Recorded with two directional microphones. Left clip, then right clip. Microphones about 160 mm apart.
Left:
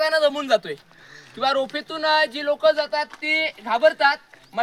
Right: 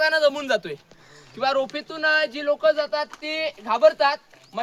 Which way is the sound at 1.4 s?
30° left (ahead or behind).